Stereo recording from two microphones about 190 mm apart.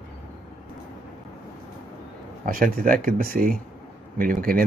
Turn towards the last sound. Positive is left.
turn(degrees=-50)  # may be behind; listen again after turning